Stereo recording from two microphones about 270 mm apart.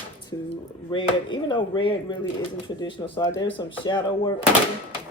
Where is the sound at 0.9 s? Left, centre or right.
Centre.